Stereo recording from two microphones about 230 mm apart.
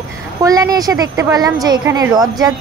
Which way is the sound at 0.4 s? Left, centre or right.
Centre.